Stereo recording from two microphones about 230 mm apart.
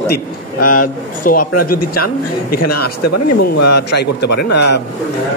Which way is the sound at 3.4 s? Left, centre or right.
Left.